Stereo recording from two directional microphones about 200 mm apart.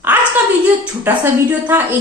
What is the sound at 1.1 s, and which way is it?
Speech, 10° right (ahead or behind).